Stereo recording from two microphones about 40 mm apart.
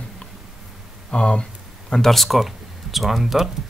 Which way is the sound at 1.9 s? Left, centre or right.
Centre.